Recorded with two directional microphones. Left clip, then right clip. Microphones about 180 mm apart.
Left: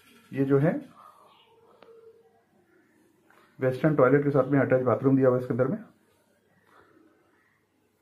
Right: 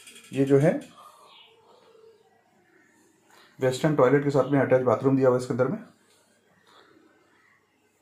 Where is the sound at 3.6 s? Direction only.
20° right (ahead or behind).